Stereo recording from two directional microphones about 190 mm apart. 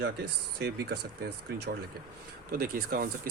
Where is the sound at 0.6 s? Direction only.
55° right (ahead or behind).